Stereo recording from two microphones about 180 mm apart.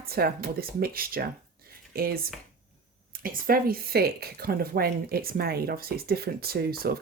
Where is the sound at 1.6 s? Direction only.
55° right (ahead or behind).